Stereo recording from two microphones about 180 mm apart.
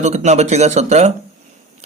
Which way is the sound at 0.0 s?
40° right (ahead or behind).